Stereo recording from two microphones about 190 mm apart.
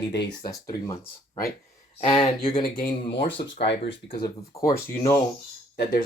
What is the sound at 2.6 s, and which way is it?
Speech, 50° left (ahead or behind).